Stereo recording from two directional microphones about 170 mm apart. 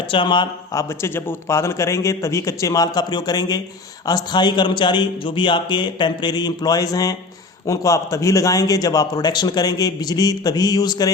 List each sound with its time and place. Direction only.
0.1 s a man's voice: 30° left (ahead or behind)